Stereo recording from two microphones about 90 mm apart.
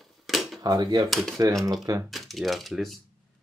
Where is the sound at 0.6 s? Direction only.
50° right (ahead or behind).